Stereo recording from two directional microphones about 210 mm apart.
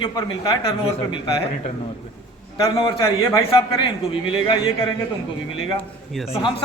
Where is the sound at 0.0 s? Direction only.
20° left (ahead or behind).